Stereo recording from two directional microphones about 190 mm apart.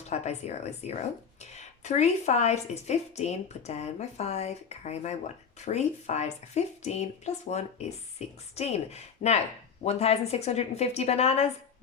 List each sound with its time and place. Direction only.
0.1 s a woman's voice: 35° left (ahead or behind)